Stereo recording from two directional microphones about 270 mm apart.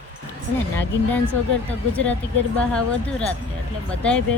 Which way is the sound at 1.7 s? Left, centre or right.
Centre.